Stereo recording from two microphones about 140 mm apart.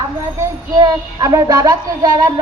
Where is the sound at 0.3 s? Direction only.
25° right (ahead or behind).